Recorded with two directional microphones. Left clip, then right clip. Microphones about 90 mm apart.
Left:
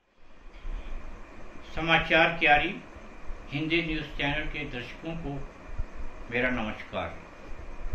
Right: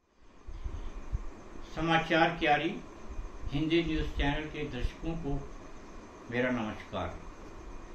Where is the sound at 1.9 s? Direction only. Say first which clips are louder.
Left 4 dB; 30° right (ahead or behind).